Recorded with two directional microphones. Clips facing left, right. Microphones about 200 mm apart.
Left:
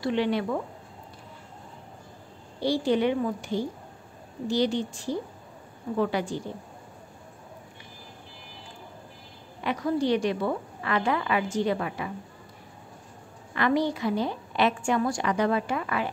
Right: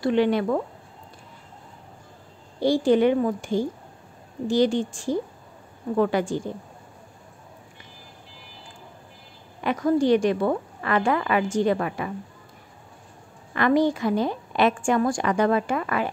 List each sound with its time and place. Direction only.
0.0 s a woman's voice: 50° right (ahead or behind)
2.6 s a woman's voice: 45° right (ahead or behind)
9.6 s a woman's voice: 50° right (ahead or behind)
13.6 s a woman's voice: 50° right (ahead or behind)